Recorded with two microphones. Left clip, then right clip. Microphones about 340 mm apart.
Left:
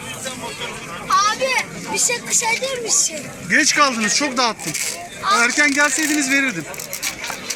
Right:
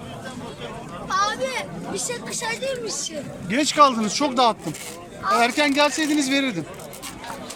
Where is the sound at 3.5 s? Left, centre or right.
Centre.